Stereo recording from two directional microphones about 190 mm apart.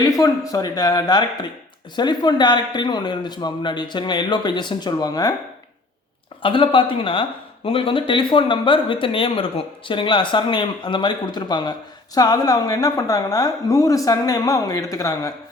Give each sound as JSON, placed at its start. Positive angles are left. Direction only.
{"t": 0.0, "sound": "speech", "side_deg": 20}
{"t": 6.4, "sound": "speech", "side_deg": 30}